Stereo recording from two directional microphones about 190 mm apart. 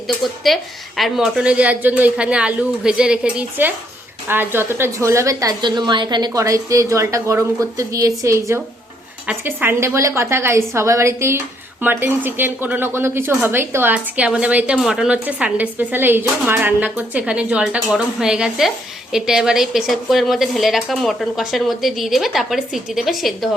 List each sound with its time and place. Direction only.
0.4 s a woman's voice: centre (ahead or behind)